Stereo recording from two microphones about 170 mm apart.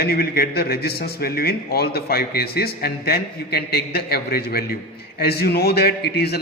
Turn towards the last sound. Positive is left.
turn(degrees=70)  # may be behind; listen again after turning